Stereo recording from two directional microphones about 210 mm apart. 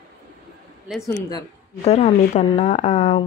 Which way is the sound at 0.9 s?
5° right (ahead or behind).